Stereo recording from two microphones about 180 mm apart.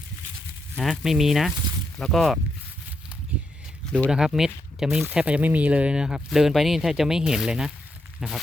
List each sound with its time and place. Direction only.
0.8 s speech: centre (ahead or behind)
4.1 s speech: 5° right (ahead or behind)